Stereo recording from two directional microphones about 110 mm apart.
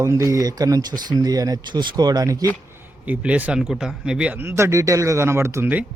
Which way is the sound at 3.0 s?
15° right (ahead or behind).